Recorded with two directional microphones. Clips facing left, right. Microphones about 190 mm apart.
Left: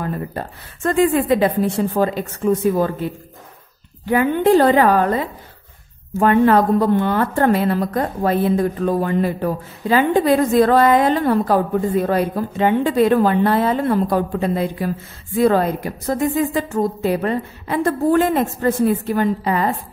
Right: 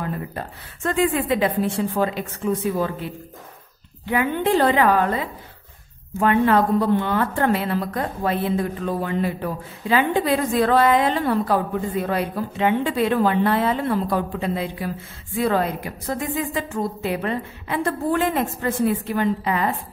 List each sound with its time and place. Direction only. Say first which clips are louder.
0.0 s a woman's voice: left 4 dB; 40° left (ahead or behind)